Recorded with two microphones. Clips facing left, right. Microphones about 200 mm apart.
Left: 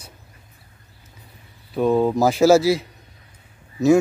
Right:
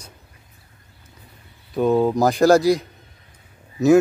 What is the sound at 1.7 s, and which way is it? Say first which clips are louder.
Speech: even; centre (ahead or behind).